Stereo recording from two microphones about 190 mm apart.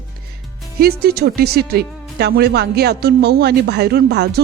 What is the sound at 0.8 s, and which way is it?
Speech, 55° right (ahead or behind).